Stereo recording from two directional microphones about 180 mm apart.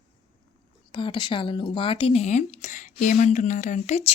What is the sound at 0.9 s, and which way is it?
Speech, 25° left (ahead or behind).